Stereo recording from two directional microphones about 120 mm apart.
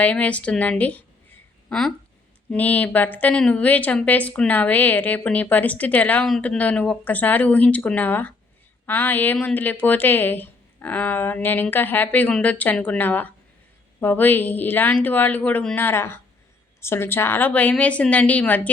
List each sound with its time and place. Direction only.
0.0 s speech: 10° left (ahead or behind)